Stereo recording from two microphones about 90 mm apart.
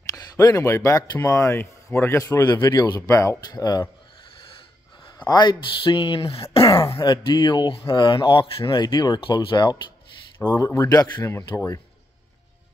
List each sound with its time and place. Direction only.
0.1 s a sound: centre (ahead or behind)
0.5 s speech: 35° left (ahead or behind)
3.4 s speech: 50° left (ahead or behind)
4.2 s snort: 75° left (ahead or behind)
5.1 s speech: 50° left (ahead or behind); by 7.0 s 90° left
7.0 s speech: 55° left (ahead or behind)
8.8 s speech: 45° left (ahead or behind)
10.7 s speech: 35° left (ahead or behind)